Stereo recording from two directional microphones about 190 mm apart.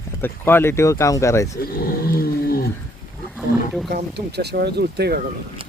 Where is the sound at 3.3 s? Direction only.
Centre (ahead or behind).